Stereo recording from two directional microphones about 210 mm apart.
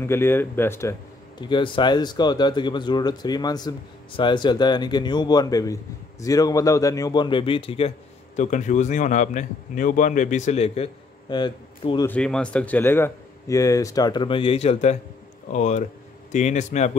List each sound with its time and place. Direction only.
0.0 s a man's voice: 10° left (ahead or behind)
12.1 s a man's voice: 5° left (ahead or behind); by 16.9 s 35° left (ahead or behind)